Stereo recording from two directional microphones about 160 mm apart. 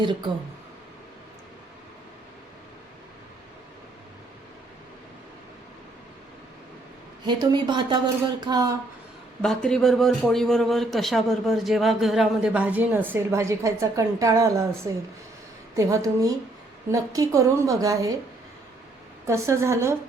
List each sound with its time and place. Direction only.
0.0 s a woman's voice: 30° right (ahead or behind)
7.3 s a woman's voice: 25° right (ahead or behind)
9.6 s a man's voice: centre (ahead or behind); by 14.7 s 20° right (ahead or behind)
15.7 s a woman's voice: 20° right (ahead or behind)
19.2 s a woman's voice: 20° right (ahead or behind)